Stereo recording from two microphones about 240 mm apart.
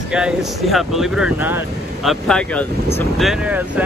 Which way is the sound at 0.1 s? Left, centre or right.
Centre.